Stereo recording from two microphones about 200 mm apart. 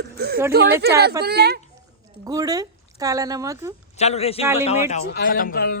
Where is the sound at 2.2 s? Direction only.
20° right (ahead or behind).